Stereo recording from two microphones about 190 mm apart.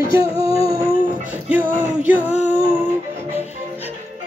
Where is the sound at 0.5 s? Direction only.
15° right (ahead or behind).